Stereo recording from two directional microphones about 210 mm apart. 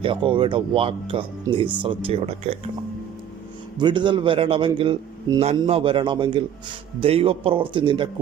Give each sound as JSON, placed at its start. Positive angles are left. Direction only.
{"t": 0.0, "sound": "a man's voice", "side_deg": -25}
{"t": 3.8, "sound": "a man's voice", "side_deg": -20}